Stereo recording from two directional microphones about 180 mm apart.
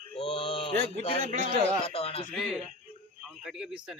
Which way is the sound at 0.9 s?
40° right (ahead or behind).